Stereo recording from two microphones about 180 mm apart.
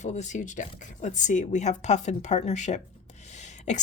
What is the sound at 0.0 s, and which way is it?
Speech, 40° left (ahead or behind).